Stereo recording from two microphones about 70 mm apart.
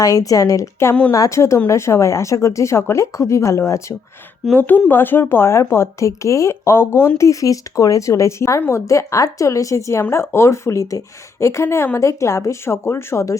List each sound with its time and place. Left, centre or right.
0.0 s a woman's voice: left
4.5 s speech: left
7.2 s speech: left